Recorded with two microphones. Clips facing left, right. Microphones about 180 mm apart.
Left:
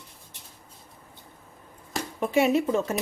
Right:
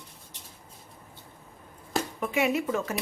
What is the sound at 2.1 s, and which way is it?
Speech, 30° left (ahead or behind).